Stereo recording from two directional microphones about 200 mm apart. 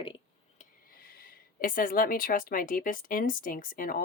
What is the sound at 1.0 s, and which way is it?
Speech, 50° left (ahead or behind).